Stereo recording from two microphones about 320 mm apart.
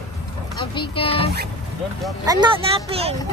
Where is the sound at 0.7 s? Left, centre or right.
Centre.